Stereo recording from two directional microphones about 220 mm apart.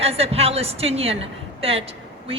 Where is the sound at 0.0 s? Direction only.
25° right (ahead or behind).